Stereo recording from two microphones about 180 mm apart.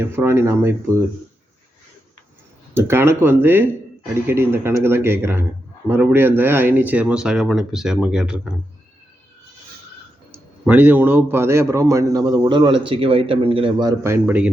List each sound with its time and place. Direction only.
0.0 s speech: 15° right (ahead or behind)
2.7 s speech: 15° right (ahead or behind)
10.7 s a man's voice: 10° right (ahead or behind)